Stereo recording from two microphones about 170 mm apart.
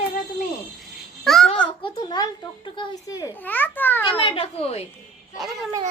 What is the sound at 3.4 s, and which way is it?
Speech, 10° left (ahead or behind).